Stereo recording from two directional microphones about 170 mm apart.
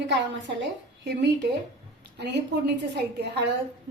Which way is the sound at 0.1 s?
90° right.